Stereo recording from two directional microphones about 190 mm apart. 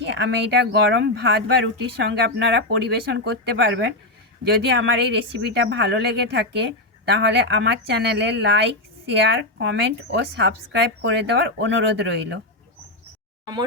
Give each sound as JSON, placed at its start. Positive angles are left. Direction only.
{"t": 0.0, "sound": "speech", "side_deg": -70}
{"t": 13.4, "sound": "speech", "side_deg": -20}